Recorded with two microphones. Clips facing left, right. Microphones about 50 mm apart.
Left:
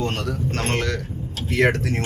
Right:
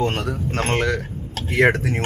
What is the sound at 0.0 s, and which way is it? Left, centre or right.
Speech, right.